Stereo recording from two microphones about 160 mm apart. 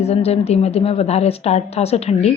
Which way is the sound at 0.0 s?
40° left (ahead or behind).